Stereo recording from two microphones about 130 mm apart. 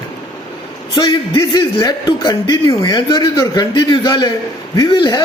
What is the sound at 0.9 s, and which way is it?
A man's voice, 35° left (ahead or behind).